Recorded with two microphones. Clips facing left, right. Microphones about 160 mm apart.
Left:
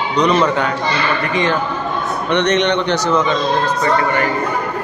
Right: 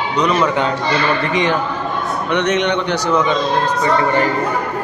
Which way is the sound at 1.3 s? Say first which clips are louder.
Even; 15° right (ahead or behind).